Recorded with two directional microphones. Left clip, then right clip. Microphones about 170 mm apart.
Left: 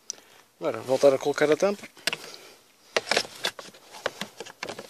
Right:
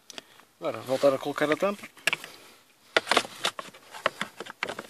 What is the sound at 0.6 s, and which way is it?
Speech, 10° left (ahead or behind).